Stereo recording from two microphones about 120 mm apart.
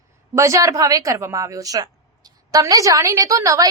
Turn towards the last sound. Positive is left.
turn(degrees=-30)  # may be behind; listen again after turning